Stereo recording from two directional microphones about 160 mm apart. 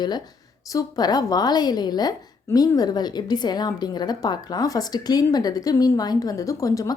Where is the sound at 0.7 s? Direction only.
25° left (ahead or behind).